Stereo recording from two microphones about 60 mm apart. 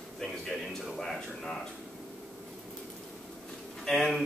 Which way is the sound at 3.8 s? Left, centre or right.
Centre.